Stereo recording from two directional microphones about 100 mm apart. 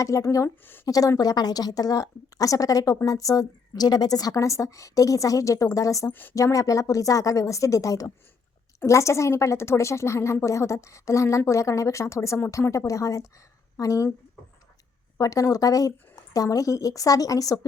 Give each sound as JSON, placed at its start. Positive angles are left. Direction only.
{"t": 0.0, "sound": "a woman's voice", "side_deg": 35}
{"t": 6.1, "sound": "a woman's voice", "side_deg": 20}
{"t": 6.3, "sound": "a woman's voice", "side_deg": 35}
{"t": 15.2, "sound": "a woman's voice", "side_deg": 35}